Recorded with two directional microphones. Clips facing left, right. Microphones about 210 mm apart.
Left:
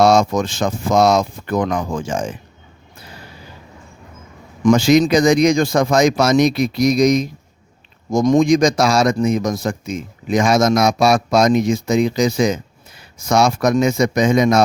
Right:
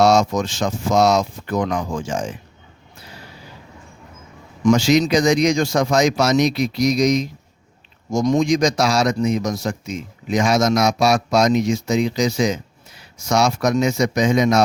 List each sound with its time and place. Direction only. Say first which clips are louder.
0.0 s speech: left 2 dB; 55° left (ahead or behind)
4.6 s speech: left 3 dB; 55° left (ahead or behind)